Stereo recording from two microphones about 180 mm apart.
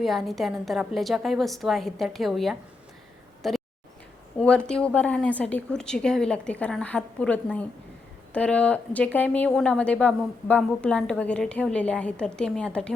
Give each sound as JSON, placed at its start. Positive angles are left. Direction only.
{"t": 0.0, "sound": "a woman's voice", "side_deg": 0}
{"t": 3.4, "sound": "a sound", "side_deg": 0}
{"t": 4.4, "sound": "a woman's voice", "side_deg": 5}